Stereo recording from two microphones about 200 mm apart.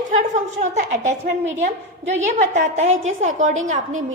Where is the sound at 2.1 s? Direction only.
35° right (ahead or behind).